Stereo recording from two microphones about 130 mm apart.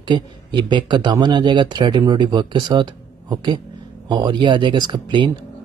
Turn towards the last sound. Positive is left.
turn(degrees=-35)  # may be behind; listen again after turning